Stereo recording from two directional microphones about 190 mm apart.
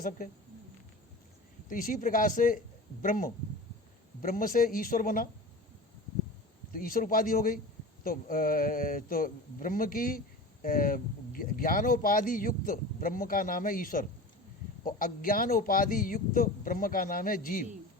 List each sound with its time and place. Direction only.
1.7 s speech: 45° left (ahead or behind)
6.7 s speech: 50° left (ahead or behind)